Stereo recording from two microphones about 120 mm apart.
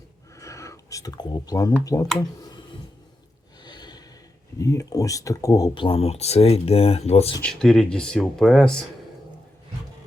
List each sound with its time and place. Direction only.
0.3 s a sound: 25° left (ahead or behind)
1.8 s speech: 30° left (ahead or behind)
3.6 s snort: 35° left (ahead or behind)
4.5 s speech: 30° left (ahead or behind)
5.8 s speech: 55° left (ahead or behind)
7.4 s speech: 5° left (ahead or behind)